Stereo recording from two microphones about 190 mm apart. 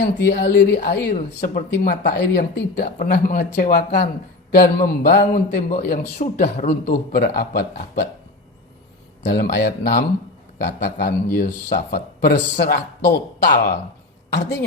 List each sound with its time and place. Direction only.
0.0 s a man's voice: 55° left (ahead or behind)
3.0 s a man's voice: 45° left (ahead or behind)
5.6 s speech: 40° left (ahead or behind)
6.7 s a man's voice: 55° left (ahead or behind)
9.2 s a man's voice: 60° left (ahead or behind)